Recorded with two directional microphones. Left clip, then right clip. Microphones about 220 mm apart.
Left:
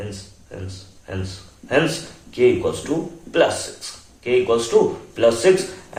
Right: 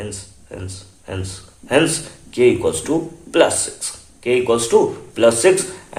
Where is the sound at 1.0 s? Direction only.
50° right (ahead or behind).